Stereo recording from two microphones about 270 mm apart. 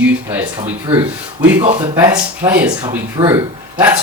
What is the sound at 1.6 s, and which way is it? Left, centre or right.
Speech, centre.